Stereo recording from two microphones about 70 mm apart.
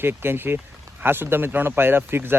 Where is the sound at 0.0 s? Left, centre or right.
Right.